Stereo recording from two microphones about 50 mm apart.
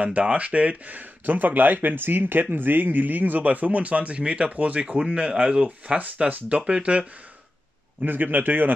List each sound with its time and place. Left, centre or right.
0.0 s speech: right
8.0 s speech: right